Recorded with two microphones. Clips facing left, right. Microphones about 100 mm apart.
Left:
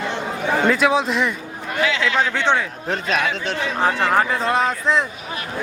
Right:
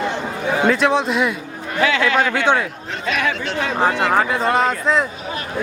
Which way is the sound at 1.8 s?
55° right (ahead or behind).